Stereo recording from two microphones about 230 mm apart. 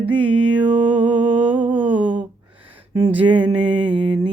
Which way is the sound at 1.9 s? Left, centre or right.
Centre.